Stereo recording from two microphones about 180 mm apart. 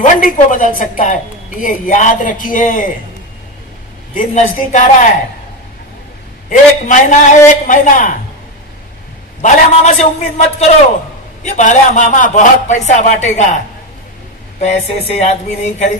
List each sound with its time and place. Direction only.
0.0 s a woman's voice: 45° left (ahead or behind)
4.1 s a woman's voice: 45° left (ahead or behind)
6.5 s a woman's voice: 45° left (ahead or behind)
9.4 s a man's voice: 40° left (ahead or behind)
14.6 s a man's voice: 40° left (ahead or behind)